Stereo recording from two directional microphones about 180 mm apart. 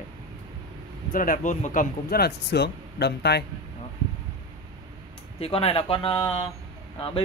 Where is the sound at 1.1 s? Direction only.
50° left (ahead or behind); by 3.4 s 65° left (ahead or behind).